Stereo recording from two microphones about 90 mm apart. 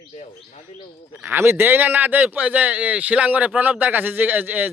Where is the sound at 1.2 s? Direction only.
25° right (ahead or behind).